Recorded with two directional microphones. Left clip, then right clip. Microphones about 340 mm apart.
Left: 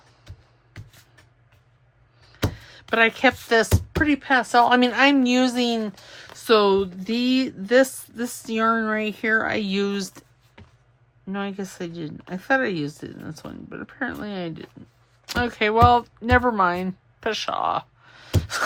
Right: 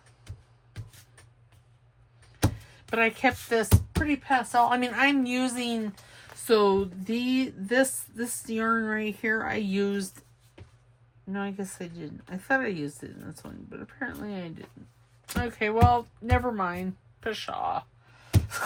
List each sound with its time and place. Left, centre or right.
2.9 s speech: centre
11.3 s speech: centre
18.3 s a sound: centre